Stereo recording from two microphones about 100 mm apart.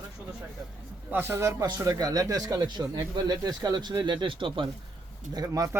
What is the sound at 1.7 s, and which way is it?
Speech, 40° right (ahead or behind).